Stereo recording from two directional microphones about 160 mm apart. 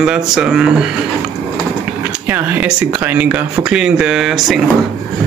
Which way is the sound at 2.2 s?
10° right (ahead or behind).